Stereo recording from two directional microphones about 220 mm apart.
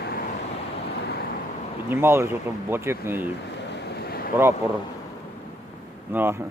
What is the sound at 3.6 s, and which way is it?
Vehicle, 50° left (ahead or behind).